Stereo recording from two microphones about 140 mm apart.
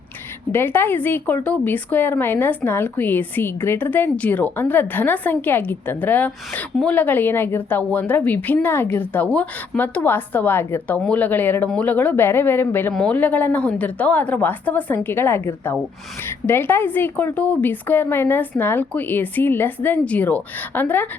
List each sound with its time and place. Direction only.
0.5 s a woman's voice: 15° left (ahead or behind)